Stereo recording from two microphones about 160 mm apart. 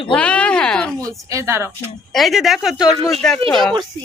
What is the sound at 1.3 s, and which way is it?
Speech, 20° right (ahead or behind).